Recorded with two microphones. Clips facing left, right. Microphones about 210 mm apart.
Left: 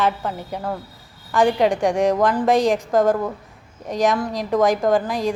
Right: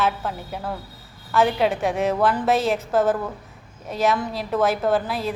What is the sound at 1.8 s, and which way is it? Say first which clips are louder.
A woman's voice: left 4 dB; 15° left (ahead or behind).